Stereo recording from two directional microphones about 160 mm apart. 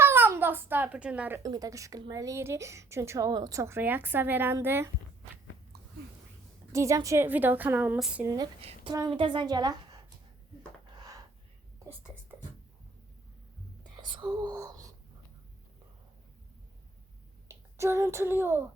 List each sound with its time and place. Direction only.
0.0 s a child's voice: 15° right (ahead or behind)
1.4 s speech: 25° right (ahead or behind)
6.7 s speech: 20° right (ahead or behind); by 8.2 s 5° right (ahead or behind)
8.2 s a woman's voice: 20° right (ahead or behind)
8.6 s a woman's voice: 35° right (ahead or behind)
10.9 s a sound: 25° right (ahead or behind)
13.9 s whispering: 30° right (ahead or behind)
17.5 s speech: 15° right (ahead or behind)